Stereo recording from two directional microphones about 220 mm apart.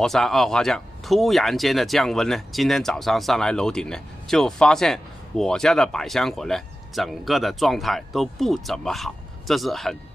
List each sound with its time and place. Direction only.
0.0 s speech: centre (ahead or behind)